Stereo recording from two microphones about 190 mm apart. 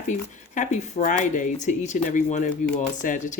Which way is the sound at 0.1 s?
40° left (ahead or behind).